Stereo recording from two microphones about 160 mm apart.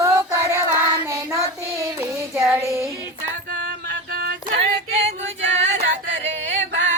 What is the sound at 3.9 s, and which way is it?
Female singing, 90° right.